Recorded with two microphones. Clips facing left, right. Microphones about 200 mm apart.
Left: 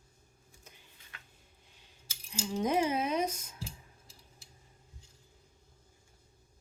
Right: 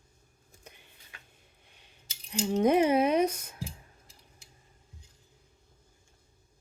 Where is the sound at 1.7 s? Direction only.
65° right (ahead or behind).